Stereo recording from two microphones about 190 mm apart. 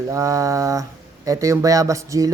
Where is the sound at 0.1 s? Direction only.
15° right (ahead or behind).